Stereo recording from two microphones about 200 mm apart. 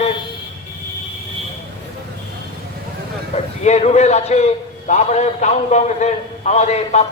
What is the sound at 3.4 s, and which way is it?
A man's voice, 35° left (ahead or behind).